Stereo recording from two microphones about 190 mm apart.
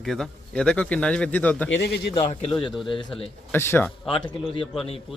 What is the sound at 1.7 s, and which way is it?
Speech, 60° left (ahead or behind).